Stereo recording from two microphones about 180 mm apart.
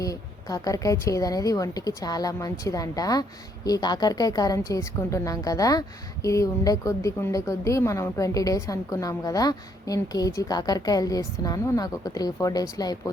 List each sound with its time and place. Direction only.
0.0 s a woman's voice: 20° left (ahead or behind)